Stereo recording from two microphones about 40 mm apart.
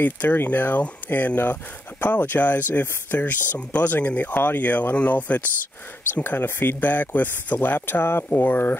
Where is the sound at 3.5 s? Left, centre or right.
Left.